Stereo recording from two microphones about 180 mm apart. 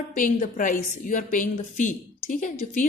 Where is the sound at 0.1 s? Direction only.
50° left (ahead or behind).